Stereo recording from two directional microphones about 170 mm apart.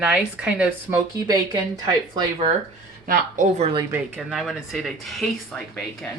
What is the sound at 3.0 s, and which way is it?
Speech, 55° right (ahead or behind).